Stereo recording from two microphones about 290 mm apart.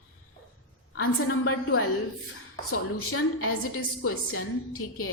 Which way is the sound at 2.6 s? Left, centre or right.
Left.